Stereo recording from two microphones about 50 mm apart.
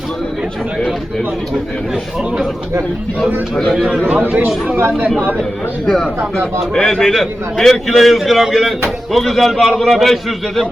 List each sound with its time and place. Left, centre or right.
4.1 s speech: right
4.4 s speech: centre
4.8 s speech: right
5.4 s a man's voice: centre